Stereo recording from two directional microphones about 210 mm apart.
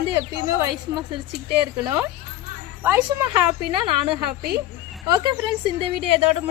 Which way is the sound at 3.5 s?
25° right (ahead or behind).